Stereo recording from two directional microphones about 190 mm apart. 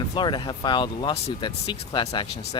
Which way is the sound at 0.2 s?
25° left (ahead or behind).